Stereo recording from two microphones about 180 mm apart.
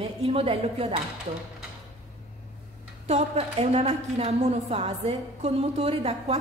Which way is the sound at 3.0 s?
35° right (ahead or behind).